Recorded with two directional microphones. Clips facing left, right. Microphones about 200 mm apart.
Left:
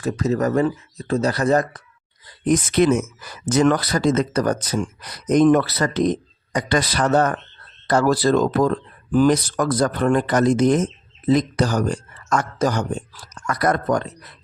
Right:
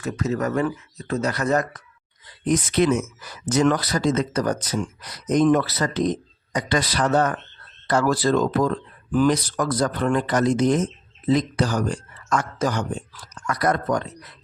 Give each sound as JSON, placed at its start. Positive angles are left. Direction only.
{"t": 0.0, "sound": "speech", "side_deg": 35}
{"t": 2.2, "sound": "speech", "side_deg": 50}